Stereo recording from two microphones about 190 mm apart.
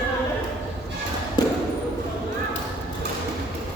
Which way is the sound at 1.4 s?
25° left (ahead or behind).